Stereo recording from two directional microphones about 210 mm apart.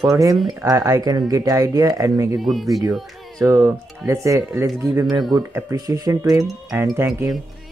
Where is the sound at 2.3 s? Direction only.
Centre (ahead or behind).